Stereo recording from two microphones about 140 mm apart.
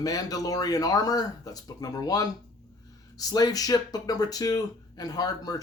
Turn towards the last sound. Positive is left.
turn(degrees=25)  # may be behind; listen again after turning